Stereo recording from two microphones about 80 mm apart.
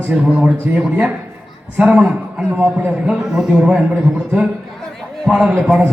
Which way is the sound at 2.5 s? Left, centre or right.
Right.